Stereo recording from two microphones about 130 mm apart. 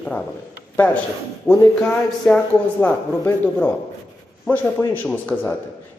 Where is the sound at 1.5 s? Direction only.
20° left (ahead or behind).